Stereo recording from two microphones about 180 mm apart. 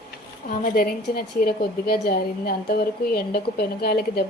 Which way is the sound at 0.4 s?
50° left (ahead or behind).